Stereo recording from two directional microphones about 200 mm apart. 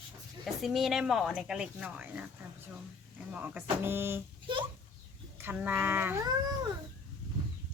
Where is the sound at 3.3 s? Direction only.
10° right (ahead or behind).